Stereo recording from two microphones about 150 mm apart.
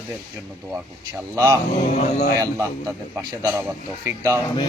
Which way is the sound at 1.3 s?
20° right (ahead or behind).